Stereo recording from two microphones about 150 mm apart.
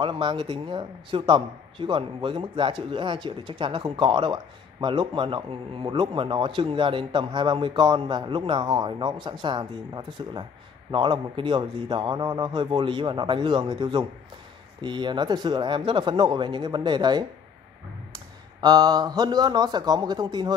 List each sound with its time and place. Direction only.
0.0 s a man's voice: 35° right (ahead or behind)
18.6 s a man's voice: 25° right (ahead or behind)